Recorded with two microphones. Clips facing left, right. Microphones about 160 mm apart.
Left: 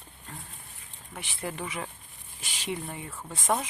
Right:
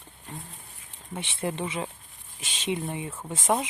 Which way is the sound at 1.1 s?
25° right (ahead or behind).